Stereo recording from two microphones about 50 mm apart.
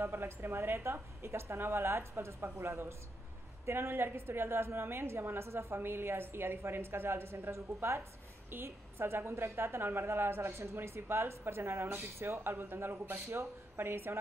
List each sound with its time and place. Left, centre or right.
0.0 s a woman's voice: right
7.5 s a woman's voice: right
8.5 s a woman's voice: right